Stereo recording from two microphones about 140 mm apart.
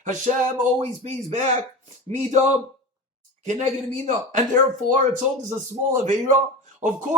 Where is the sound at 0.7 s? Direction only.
50° right (ahead or behind).